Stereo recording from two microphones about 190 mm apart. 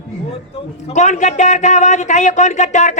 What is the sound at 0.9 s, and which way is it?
A man's voice, 40° left (ahead or behind).